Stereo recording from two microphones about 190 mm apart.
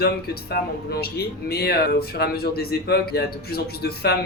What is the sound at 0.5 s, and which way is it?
Speech, 55° left (ahead or behind).